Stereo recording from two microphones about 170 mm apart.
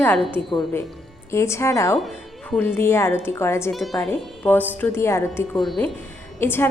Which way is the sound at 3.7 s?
Centre (ahead or behind).